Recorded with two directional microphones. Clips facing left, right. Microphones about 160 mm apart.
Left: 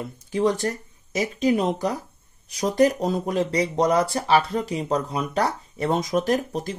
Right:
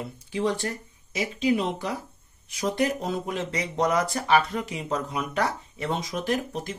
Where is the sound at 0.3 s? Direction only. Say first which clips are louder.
Left 5 dB; 45° left (ahead or behind).